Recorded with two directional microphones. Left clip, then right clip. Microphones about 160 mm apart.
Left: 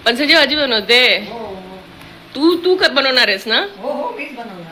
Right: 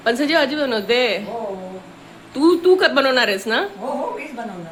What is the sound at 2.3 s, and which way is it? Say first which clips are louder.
A woman's voice: even; 15° right (ahead or behind).